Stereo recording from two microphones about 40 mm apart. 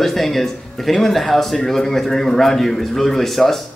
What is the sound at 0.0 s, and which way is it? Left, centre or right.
A man's voice, centre.